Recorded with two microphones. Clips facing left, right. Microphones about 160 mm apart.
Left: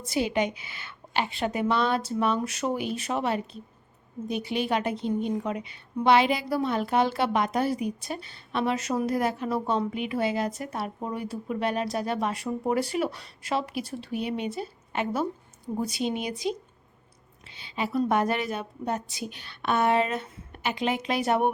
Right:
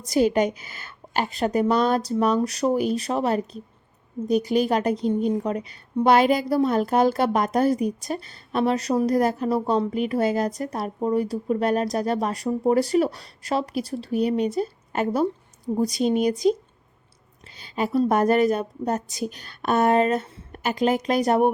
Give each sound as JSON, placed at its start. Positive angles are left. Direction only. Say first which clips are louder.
{"t": 0.0, "sound": "speech", "louder": "right 6 dB", "side_deg": -40}
{"t": 17.4, "sound": "a sound", "louder": "right 5 dB", "side_deg": -45}
{"t": 18.0, "sound": "speech", "louder": "right 7 dB", "side_deg": -40}